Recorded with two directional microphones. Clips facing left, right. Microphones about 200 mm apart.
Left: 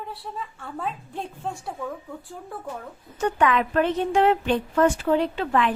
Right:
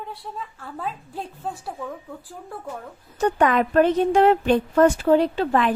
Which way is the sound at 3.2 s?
40° right (ahead or behind).